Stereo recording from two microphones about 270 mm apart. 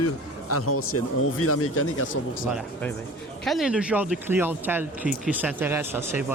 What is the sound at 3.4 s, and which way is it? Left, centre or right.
Speech, centre.